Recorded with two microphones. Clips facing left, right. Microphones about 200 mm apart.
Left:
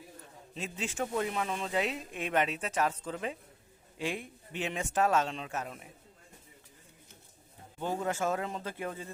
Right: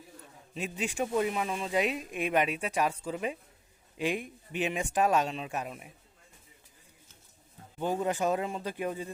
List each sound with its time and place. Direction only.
0.5 s speech: 15° right (ahead or behind)
7.8 s speech: 15° right (ahead or behind)